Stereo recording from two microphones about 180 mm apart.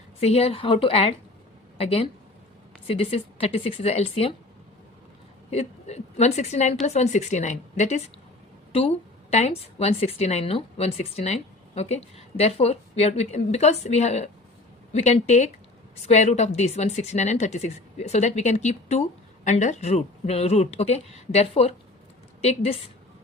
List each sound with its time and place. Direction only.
0.2 s a woman's voice: 35° left (ahead or behind)
5.5 s a woman's voice: 35° left (ahead or behind)
9.3 s a woman's voice: 35° left (ahead or behind)